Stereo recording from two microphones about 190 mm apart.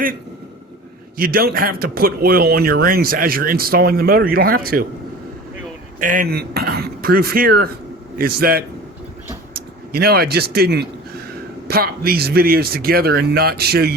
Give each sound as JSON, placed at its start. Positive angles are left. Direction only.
{"t": 1.1, "sound": "speech", "side_deg": -50}
{"t": 6.0, "sound": "speech", "side_deg": -45}
{"t": 9.9, "sound": "speech", "side_deg": -55}